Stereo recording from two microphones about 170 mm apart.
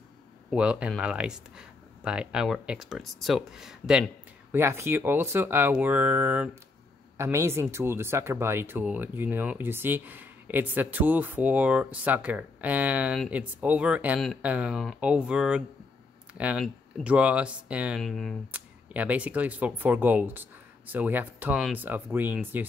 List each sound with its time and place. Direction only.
0.5 s speech: 5° right (ahead or behind)
18.5 s speech: 10° right (ahead or behind)